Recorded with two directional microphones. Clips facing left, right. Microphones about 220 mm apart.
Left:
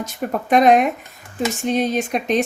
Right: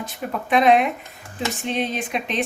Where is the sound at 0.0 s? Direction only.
45° left (ahead or behind).